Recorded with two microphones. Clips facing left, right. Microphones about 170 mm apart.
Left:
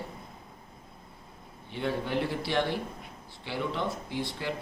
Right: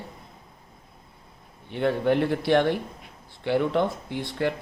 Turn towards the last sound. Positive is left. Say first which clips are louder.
# right 7 dB
turn(degrees=-55)  # may be behind; listen again after turning